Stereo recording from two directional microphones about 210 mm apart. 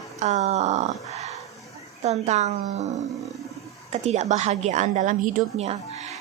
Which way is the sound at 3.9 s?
30° right (ahead or behind).